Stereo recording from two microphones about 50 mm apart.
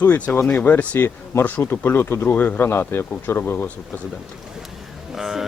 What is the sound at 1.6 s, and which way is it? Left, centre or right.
Speech, left.